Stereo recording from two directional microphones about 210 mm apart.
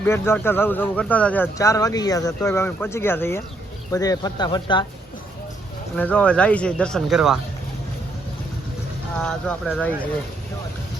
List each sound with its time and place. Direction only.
0.0 s speech: 10° left (ahead or behind)
6.0 s speech: 5° left (ahead or behind)
9.2 s speech: 5° left (ahead or behind)